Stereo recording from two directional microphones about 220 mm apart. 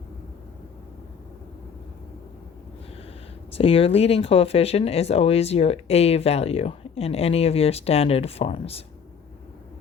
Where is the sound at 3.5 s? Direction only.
25° left (ahead or behind).